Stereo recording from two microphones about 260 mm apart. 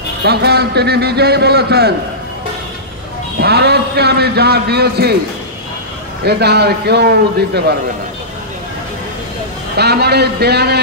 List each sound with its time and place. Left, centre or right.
0.2 s a man's voice: right
3.3 s a man's voice: right
6.2 s a man's voice: right
9.8 s a man's voice: right